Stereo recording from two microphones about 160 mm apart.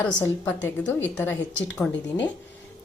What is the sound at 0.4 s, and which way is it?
Speech, 10° left (ahead or behind).